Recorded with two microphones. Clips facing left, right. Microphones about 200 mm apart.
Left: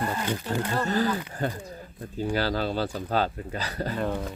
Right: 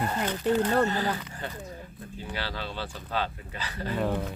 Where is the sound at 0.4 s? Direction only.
55° right (ahead or behind).